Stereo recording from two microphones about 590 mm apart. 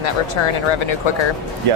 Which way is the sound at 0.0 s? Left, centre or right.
Left.